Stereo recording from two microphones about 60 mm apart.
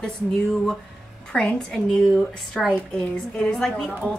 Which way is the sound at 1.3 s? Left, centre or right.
Centre.